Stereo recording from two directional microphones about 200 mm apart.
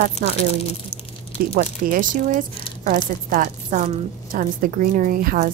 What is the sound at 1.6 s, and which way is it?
A woman's voice, 45° right (ahead or behind).